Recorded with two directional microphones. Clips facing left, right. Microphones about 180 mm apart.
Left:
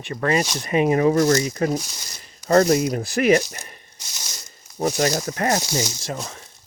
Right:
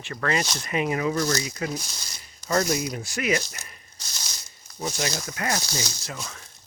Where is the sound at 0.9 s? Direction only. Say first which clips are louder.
Left 8 dB; 45° left (ahead or behind).